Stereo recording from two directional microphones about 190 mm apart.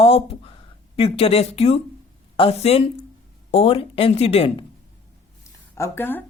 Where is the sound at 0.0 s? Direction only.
30° left (ahead or behind).